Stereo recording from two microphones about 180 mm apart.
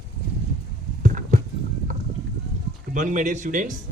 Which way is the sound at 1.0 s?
45° right (ahead or behind).